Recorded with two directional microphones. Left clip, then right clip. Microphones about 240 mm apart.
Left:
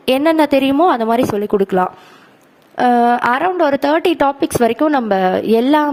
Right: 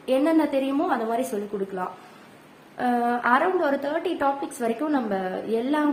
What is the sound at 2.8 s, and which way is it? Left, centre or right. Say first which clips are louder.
A woman's voice: left 11 dB; left.